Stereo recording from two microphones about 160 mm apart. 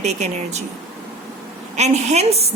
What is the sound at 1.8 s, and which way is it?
Speech, 45° right (ahead or behind).